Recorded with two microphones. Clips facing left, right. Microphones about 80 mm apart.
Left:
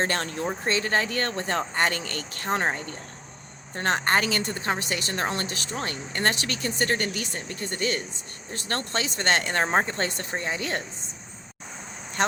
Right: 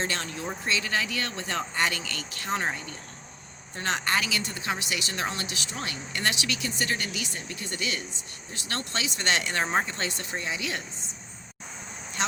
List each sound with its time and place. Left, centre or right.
0.0 s speech: left